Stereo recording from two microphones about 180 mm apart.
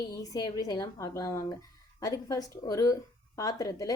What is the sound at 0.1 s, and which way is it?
Speech, 20° left (ahead or behind).